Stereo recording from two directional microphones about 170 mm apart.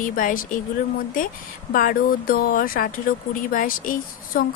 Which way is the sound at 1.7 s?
55° left (ahead or behind).